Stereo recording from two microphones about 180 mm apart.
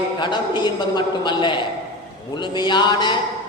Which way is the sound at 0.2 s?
25° left (ahead or behind).